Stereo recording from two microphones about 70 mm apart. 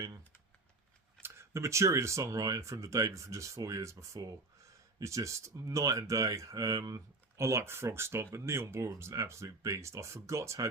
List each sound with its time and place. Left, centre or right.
1.2 s speech: right
7.3 s speech: right